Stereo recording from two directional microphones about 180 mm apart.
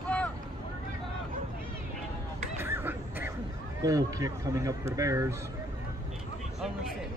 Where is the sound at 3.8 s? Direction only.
20° right (ahead or behind).